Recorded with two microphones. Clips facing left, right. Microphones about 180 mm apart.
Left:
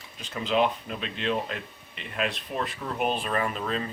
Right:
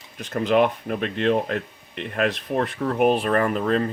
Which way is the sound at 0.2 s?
50° right (ahead or behind).